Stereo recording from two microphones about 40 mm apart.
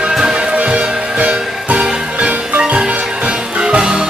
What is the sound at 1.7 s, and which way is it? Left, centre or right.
Music, right.